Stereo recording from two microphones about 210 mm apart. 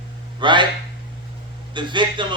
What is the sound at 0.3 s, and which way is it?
Speech, 20° right (ahead or behind).